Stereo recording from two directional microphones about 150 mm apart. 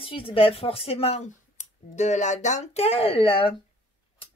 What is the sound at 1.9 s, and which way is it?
Speech, 50° left (ahead or behind).